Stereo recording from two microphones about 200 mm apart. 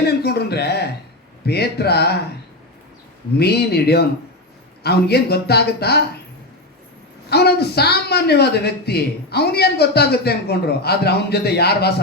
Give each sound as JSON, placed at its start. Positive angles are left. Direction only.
{"t": 0.2, "sound": "a man's voice", "side_deg": 55}
{"t": 3.3, "sound": "a woman's voice", "side_deg": 55}
{"t": 7.3, "sound": "a woman's voice", "side_deg": 55}